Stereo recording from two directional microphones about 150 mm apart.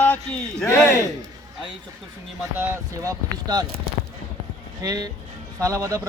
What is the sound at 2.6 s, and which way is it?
Speech, 20° right (ahead or behind).